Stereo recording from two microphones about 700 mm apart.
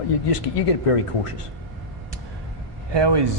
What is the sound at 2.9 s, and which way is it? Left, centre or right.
Speech, right.